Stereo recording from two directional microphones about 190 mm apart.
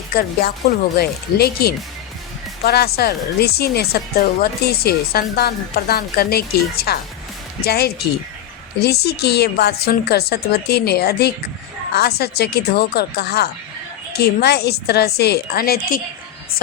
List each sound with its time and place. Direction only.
0.1 s a woman's voice: 55° left (ahead or behind)